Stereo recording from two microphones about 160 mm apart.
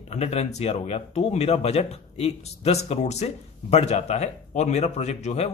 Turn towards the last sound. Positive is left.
turn(degrees=40)  # may be behind; listen again after turning